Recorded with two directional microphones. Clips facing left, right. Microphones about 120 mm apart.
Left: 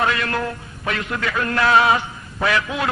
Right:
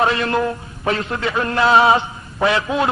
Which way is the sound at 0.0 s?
25° right (ahead or behind).